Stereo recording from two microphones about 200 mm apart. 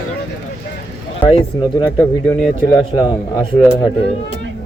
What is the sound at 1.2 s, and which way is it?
Speech, 25° left (ahead or behind).